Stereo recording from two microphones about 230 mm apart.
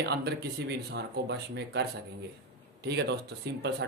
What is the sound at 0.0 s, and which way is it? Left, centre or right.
Speech, right.